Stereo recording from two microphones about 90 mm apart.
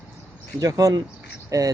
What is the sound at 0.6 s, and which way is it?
Speech, 40° right (ahead or behind).